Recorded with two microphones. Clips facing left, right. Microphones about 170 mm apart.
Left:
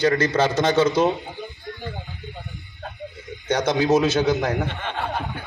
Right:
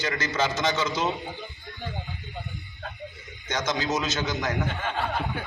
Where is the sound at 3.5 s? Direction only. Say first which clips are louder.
Left 9 dB; 60° left (ahead or behind).